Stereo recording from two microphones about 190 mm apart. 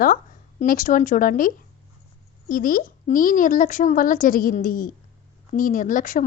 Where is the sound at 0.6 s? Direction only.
45° left (ahead or behind).